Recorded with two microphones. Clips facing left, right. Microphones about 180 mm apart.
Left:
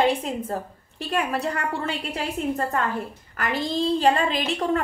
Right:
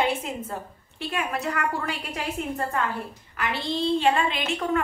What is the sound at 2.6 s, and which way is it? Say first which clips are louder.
A woman's voice: left 2 dB; 40° left (ahead or behind).